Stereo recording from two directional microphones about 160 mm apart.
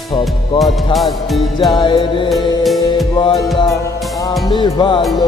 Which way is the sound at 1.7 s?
30° left (ahead or behind).